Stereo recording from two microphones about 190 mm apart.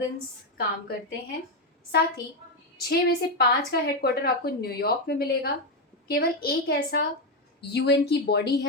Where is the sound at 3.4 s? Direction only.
55° left (ahead or behind).